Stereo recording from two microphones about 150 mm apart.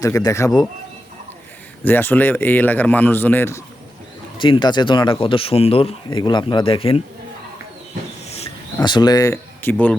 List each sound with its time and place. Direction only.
0.0 s speech: 20° left (ahead or behind)
1.8 s speech: 15° left (ahead or behind)
4.4 s speech: 35° left (ahead or behind)
6.1 s speech: 30° left (ahead or behind)
8.8 s speech: 30° left (ahead or behind); by 10.0 s 10° left (ahead or behind)